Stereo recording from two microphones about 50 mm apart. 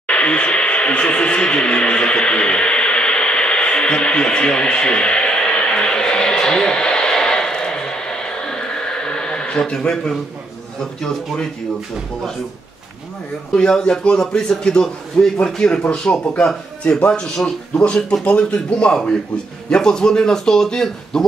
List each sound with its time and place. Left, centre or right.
0.0 s a sound: left
10.8 s speech: centre
13.5 s speech: centre